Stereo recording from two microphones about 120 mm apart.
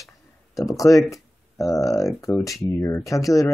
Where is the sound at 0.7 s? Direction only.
30° left (ahead or behind).